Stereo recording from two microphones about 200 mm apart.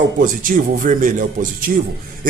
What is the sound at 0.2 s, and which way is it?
A man's voice, 40° right (ahead or behind).